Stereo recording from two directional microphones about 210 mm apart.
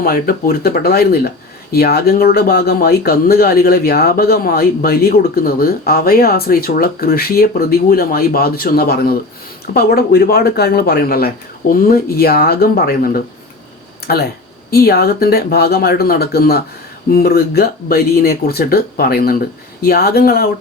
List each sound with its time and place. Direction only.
0.0 s speech: 45° left (ahead or behind)